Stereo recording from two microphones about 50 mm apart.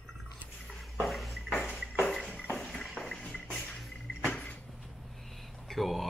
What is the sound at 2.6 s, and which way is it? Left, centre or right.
Music, centre.